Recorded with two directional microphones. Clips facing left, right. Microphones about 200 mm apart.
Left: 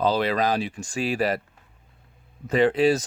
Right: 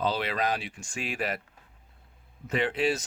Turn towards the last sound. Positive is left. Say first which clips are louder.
# left 8 dB
turn(degrees=40)  # may be behind; listen again after turning